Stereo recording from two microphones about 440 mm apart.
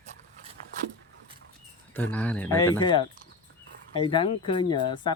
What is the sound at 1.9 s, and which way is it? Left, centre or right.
Speech, centre.